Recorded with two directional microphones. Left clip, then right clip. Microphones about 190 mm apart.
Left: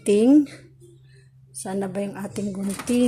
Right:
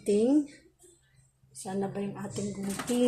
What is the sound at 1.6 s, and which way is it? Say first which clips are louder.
Speech: left 6 dB; 60° left (ahead or behind).